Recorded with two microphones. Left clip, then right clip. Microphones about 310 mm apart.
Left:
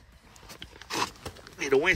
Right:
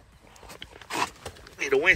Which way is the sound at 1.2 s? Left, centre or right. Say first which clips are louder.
Right 2 dB; centre.